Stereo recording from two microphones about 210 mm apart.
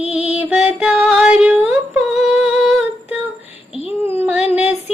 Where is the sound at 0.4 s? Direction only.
5° right (ahead or behind).